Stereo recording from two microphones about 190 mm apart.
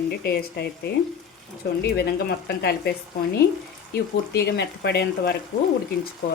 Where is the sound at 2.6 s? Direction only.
55° left (ahead or behind).